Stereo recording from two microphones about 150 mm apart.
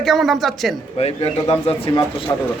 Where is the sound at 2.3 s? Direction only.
25° left (ahead or behind).